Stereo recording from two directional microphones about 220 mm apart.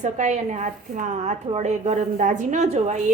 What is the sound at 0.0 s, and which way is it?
A woman's voice, 30° right (ahead or behind).